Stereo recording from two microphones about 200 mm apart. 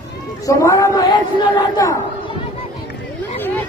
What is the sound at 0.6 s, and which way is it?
A man's voice, 15° left (ahead or behind).